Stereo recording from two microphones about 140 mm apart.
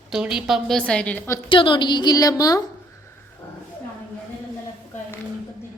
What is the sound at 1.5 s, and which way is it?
A woman's voice, 35° left (ahead or behind).